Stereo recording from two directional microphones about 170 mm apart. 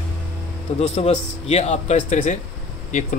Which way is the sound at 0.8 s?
35° left (ahead or behind).